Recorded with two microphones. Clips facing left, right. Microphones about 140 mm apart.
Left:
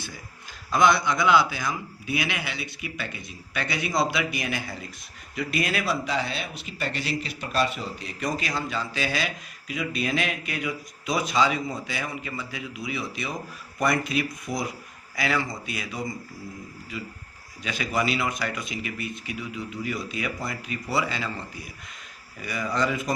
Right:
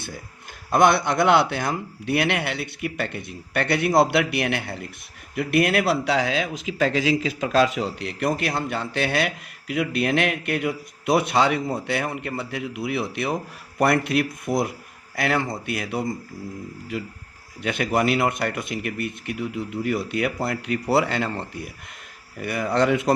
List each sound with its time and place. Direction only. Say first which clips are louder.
0.7 s a man's voice: right 3 dB; 55° right (ahead or behind)
17.6 s a man's voice: right 5 dB; 60° right (ahead or behind)